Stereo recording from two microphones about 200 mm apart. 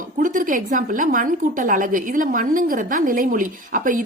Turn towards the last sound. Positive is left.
turn(degrees=-40)  # may be behind; listen again after turning